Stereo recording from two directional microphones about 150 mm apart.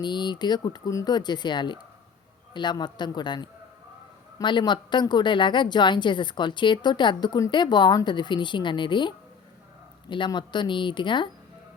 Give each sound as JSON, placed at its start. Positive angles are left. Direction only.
{"t": 0.0, "sound": "a woman's voice", "side_deg": 30}